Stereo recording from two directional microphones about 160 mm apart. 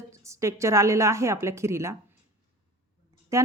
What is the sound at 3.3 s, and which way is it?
Speech, 20° right (ahead or behind).